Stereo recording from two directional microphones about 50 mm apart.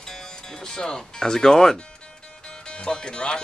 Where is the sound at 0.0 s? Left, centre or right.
Centre.